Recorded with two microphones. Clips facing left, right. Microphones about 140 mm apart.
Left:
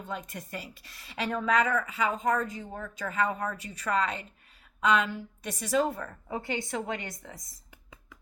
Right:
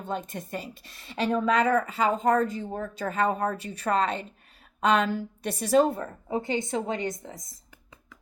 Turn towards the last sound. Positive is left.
turn(degrees=-20)  # may be behind; listen again after turning